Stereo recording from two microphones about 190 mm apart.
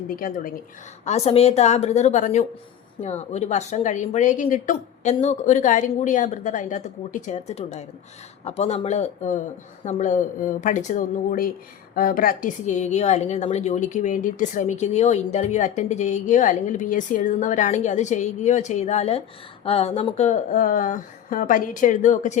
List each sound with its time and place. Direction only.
0.2 s speech: 45° left (ahead or behind)
1.0 s a woman's voice: 35° left (ahead or behind)